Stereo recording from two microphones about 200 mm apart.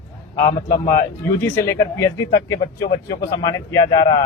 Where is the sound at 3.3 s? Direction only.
20° left (ahead or behind).